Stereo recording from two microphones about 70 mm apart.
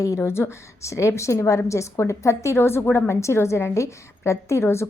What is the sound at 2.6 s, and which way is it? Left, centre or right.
A woman's voice, left.